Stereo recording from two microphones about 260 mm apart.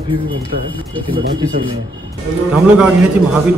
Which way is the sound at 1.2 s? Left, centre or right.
Right.